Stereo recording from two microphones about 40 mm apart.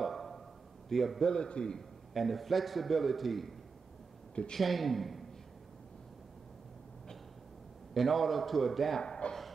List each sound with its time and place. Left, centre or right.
0.0 s a sound: centre
0.8 s a man's voice: centre
1.2 s a man's voice: left
1.8 s a man's voice: centre
4.6 s a man's voice: centre
7.9 s a man's voice: centre
9.0 s a man's voice: left